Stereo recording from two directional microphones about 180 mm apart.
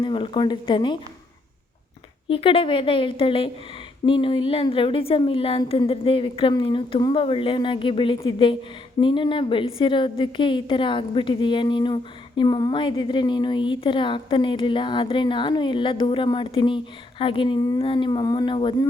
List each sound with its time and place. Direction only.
0.0 s a woman's voice: 25° left (ahead or behind)
2.3 s a woman's voice: 30° left (ahead or behind)